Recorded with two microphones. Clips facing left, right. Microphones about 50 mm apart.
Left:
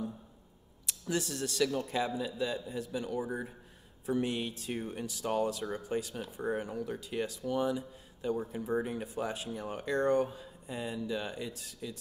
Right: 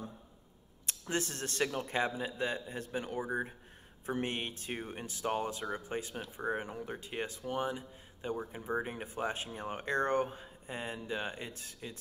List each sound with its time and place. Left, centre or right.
0.8 s speech: right